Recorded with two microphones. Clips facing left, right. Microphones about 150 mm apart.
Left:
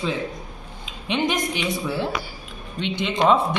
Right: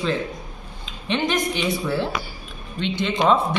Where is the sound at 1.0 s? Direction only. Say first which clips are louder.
Right 1 dB; 15° left (ahead or behind).